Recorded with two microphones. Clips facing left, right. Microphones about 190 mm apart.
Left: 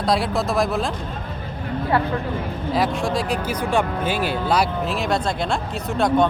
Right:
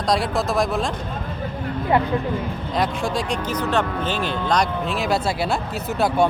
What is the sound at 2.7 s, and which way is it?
Speech, 5° left (ahead or behind).